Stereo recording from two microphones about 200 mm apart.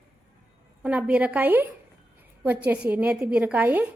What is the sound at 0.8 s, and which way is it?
Speech, 5° right (ahead or behind).